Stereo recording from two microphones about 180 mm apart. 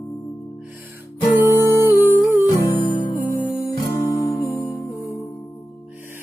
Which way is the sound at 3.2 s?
50° left (ahead or behind).